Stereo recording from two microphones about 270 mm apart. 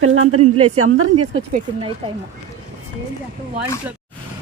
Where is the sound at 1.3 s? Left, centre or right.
Right.